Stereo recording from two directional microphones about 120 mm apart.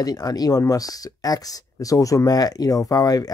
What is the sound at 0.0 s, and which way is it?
Speech, 30° left (ahead or behind).